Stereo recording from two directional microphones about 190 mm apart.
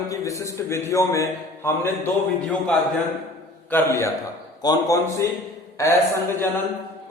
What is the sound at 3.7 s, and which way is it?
A man's voice, 10° left (ahead or behind).